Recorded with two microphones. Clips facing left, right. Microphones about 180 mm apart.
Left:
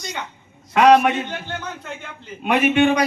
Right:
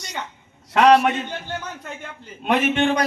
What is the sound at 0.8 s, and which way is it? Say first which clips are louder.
Speech: left 1 dB; 10° left (ahead or behind).